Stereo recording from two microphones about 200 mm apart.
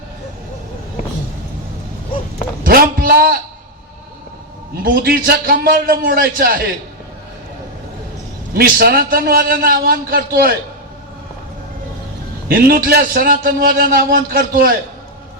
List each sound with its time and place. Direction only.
2.6 s a man's voice: 45° right (ahead or behind)
4.7 s a man's voice: 45° right (ahead or behind)
8.5 s a man's voice: 45° right (ahead or behind)
12.5 s a man's voice: 45° right (ahead or behind)